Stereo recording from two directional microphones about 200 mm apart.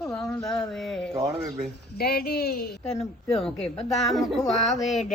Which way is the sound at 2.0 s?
50° left (ahead or behind).